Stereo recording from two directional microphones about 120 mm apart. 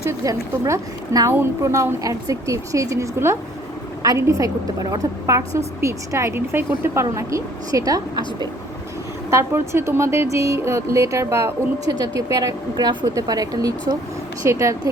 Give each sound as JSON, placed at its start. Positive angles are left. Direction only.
{"t": 0.0, "sound": "a woman's voice", "side_deg": -25}
{"t": 9.3, "sound": "a woman's voice", "side_deg": -20}